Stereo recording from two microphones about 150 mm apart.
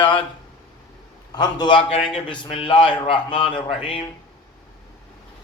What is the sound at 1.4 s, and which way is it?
A man's voice, 30° left (ahead or behind).